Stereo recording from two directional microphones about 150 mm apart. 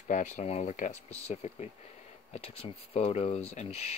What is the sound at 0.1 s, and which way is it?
Speech, 50° left (ahead or behind).